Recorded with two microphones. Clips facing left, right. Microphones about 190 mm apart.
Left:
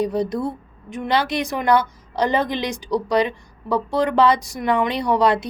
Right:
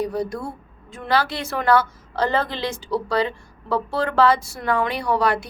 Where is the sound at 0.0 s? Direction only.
20° left (ahead or behind).